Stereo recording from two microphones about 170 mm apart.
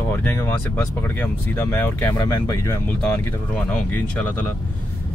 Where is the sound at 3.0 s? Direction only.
10° left (ahead or behind).